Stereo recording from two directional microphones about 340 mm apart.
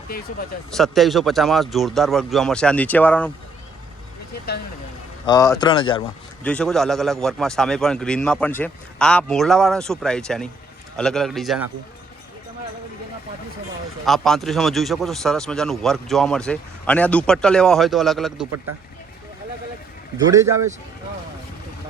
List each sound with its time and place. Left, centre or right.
0.1 s speech: left
0.7 s speech: centre
5.2 s speech: centre
6.4 s speech: centre
14.0 s speech: centre
20.2 s speech: centre